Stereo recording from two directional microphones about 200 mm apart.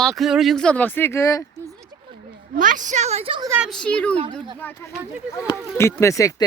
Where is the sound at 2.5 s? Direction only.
40° right (ahead or behind).